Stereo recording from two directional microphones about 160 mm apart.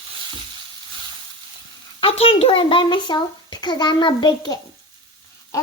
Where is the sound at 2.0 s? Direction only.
35° left (ahead or behind).